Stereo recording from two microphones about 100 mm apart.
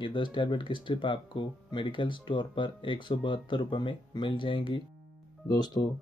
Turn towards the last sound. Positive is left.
turn(degrees=40)  # may be behind; listen again after turning